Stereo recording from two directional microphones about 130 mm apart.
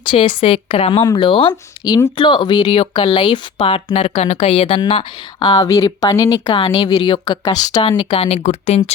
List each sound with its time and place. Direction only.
0.1 s speech: 40° left (ahead or behind)
2.6 s speech: 45° left (ahead or behind)
4.0 s speech: 55° left (ahead or behind)
5.4 s speech: 30° left (ahead or behind)
6.4 s speech: 40° left (ahead or behind)
7.7 s speech: 40° left (ahead or behind); by 8.8 s 60° left (ahead or behind)